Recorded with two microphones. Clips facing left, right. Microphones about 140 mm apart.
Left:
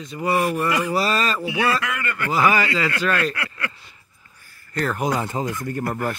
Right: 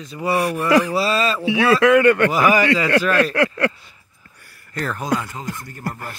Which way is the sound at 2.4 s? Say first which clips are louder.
Right 3 dB; 15° right (ahead or behind).